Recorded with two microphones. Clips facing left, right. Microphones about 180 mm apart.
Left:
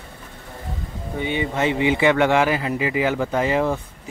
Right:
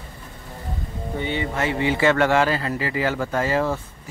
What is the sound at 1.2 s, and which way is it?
Speech, 15° left (ahead or behind).